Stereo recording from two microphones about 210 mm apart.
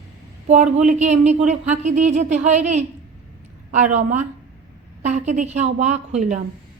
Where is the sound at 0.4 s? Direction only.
35° right (ahead or behind).